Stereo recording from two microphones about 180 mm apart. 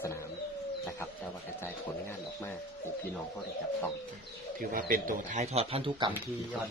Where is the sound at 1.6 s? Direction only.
15° left (ahead or behind).